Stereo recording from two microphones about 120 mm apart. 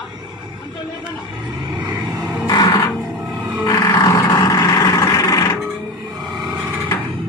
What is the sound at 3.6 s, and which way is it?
Vehicle, 30° left (ahead or behind).